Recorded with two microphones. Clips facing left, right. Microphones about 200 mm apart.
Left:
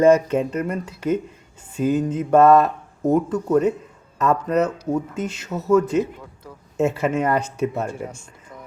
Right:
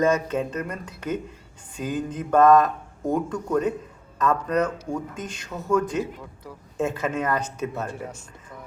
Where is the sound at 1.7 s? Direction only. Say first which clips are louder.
Left 8 dB; 5° left (ahead or behind).